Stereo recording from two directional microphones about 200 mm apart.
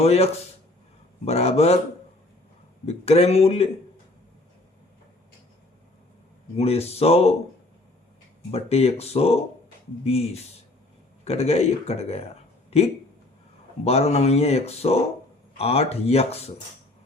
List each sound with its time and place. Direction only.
0.0 s speech: 30° left (ahead or behind)
2.8 s speech: 30° left (ahead or behind)
6.6 s speech: 30° left (ahead or behind)
8.4 s speech: 30° left (ahead or behind)
13.8 s speech: 30° left (ahead or behind)